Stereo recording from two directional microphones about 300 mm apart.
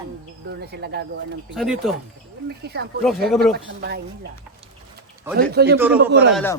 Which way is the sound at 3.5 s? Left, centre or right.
Right.